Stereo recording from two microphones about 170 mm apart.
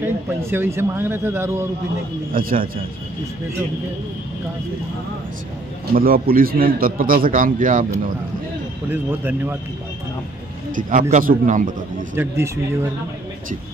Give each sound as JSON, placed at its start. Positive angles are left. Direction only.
{"t": 0.0, "sound": "speech", "side_deg": -15}
{"t": 2.3, "sound": "a man's voice", "side_deg": -55}
{"t": 5.9, "sound": "a man's voice", "side_deg": -60}
{"t": 8.9, "sound": "speech", "side_deg": -10}
{"t": 10.7, "sound": "a man's voice", "side_deg": -50}
{"t": 12.2, "sound": "speech", "side_deg": -10}